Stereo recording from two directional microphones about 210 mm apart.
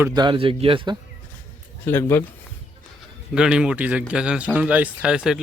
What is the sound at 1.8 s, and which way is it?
Speech, 10° left (ahead or behind).